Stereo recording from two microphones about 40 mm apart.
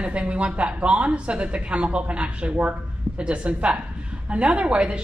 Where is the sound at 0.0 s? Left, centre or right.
Right.